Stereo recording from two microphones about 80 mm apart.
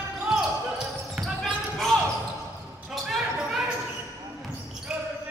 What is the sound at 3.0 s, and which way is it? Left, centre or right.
Basketball bounce, centre.